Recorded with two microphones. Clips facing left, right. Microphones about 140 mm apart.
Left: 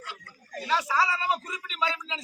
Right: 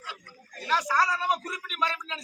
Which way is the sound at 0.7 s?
5° left (ahead or behind).